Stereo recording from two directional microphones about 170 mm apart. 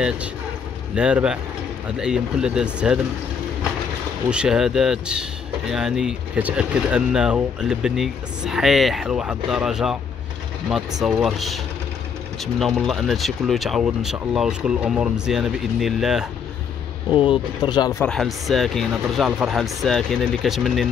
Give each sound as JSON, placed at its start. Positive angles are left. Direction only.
{"t": 0.9, "sound": "speech", "side_deg": -5}
{"t": 4.3, "sound": "speech", "side_deg": -5}
{"t": 17.1, "sound": "speech", "side_deg": 30}
{"t": 18.0, "sound": "speech", "side_deg": 5}